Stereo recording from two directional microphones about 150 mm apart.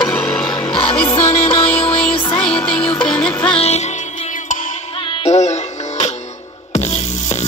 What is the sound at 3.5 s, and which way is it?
Music, 45° left (ahead or behind).